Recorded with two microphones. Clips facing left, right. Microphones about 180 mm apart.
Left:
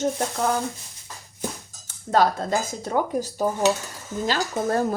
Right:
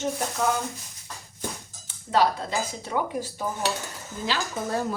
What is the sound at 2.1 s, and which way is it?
Speech, 45° left (ahead or behind).